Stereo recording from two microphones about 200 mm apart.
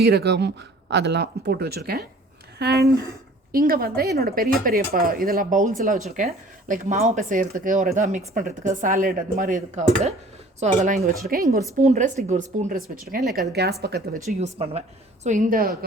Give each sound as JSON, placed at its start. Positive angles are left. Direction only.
{"t": 0.0, "sound": "a woman's voice", "side_deg": -55}
{"t": 11.8, "sound": "a woman's voice", "side_deg": -35}
{"t": 14.3, "sound": "speech", "side_deg": -30}